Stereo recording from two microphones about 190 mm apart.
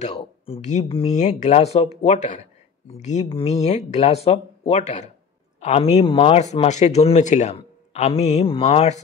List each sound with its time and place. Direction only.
0.0 s speech: 35° left (ahead or behind)